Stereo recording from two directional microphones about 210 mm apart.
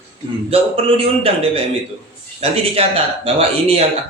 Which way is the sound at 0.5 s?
25° right (ahead or behind).